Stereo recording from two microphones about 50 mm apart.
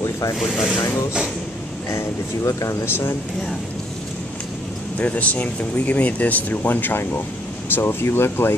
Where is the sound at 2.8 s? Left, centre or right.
Left.